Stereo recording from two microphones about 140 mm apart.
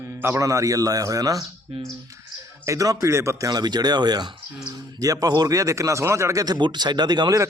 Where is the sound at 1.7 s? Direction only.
45° right (ahead or behind).